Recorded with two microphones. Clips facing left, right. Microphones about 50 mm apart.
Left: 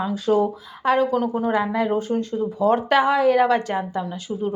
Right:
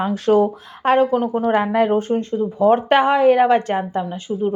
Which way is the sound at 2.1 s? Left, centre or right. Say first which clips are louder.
Right 3 dB; right.